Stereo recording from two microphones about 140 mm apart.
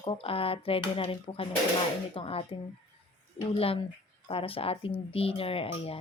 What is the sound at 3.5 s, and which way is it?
Speech, 45° left (ahead or behind).